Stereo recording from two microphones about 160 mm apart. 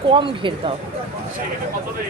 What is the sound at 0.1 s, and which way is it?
Speech, 30° right (ahead or behind).